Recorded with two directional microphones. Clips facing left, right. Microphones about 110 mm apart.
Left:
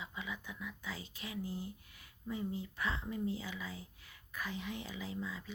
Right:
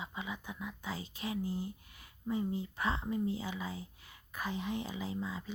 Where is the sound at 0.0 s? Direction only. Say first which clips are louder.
Right 3 dB; 25° right (ahead or behind).